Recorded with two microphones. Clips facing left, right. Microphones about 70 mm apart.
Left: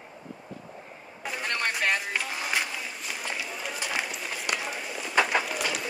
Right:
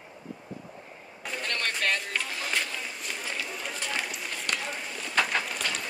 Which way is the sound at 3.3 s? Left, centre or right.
Centre.